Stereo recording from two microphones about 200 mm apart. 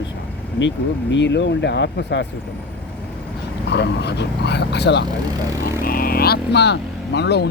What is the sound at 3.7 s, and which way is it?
Speech, 55° left (ahead or behind).